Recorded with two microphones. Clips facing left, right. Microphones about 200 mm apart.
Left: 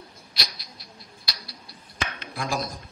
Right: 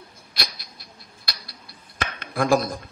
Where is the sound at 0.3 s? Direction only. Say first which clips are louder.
Right 4 dB; 55° right (ahead or behind).